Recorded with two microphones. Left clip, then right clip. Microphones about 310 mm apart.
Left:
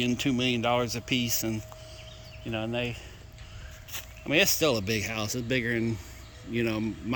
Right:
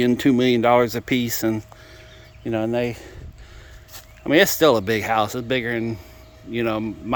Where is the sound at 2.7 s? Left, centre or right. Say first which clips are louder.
Right 8 dB; centre.